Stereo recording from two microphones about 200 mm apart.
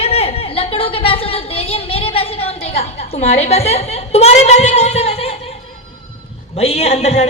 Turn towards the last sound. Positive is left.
turn(degrees=35)  # may be behind; listen again after turning